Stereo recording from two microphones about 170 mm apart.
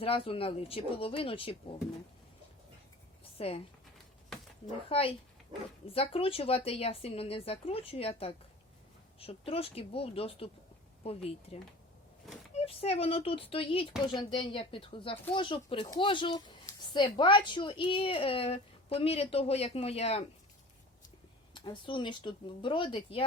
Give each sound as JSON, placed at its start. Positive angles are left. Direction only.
{"t": 0.0, "sound": "a woman's voice", "side_deg": 30}
{"t": 3.3, "sound": "speech", "side_deg": 35}
{"t": 4.9, "sound": "a woman's voice", "side_deg": 35}
{"t": 9.5, "sound": "a woman's voice", "side_deg": 35}
{"t": 21.5, "sound": "speech", "side_deg": 25}